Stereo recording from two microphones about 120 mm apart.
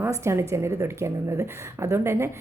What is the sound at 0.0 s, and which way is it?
A woman's voice, 25° right (ahead or behind).